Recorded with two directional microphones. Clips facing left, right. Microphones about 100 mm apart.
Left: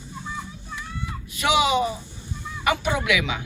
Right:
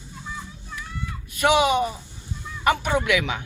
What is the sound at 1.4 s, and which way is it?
Speech, 50° right (ahead or behind).